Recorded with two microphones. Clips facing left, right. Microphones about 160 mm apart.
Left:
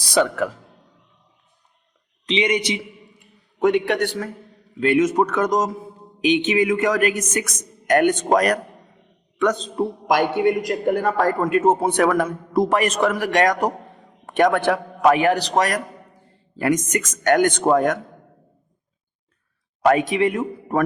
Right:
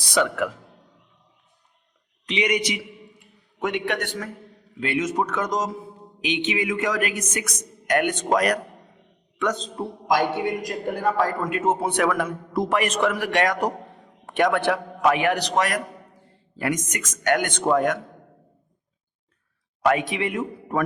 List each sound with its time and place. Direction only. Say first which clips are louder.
0.1 s a man's voice: left 3 dB; 35° left (ahead or behind)
2.2 s a man's voice: left 3 dB; 25° left (ahead or behind)
4.8 s speech: left 7 dB; 50° left (ahead or behind)
9.4 s a man's voice: left 6 dB; 55° left (ahead or behind)
19.8 s a man's voice: left 5 dB; 45° left (ahead or behind)